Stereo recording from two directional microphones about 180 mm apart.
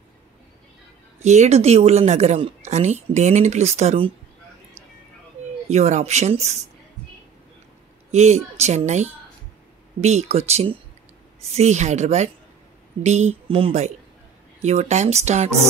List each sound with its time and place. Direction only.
1.2 s a woman's voice: 40° right (ahead or behind)
5.7 s a woman's voice: 40° right (ahead or behind)
8.1 s a woman's voice: 40° right (ahead or behind)